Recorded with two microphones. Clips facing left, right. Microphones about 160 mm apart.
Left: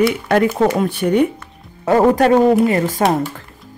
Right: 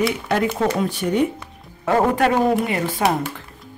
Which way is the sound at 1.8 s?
40° left (ahead or behind).